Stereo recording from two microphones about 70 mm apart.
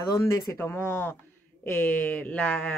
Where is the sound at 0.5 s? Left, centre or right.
Left.